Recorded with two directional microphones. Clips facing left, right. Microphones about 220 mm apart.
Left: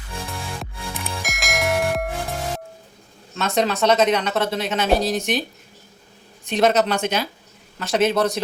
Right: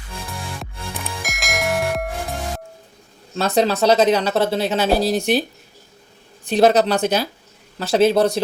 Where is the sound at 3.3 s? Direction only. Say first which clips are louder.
Right 3 dB; 30° right (ahead or behind).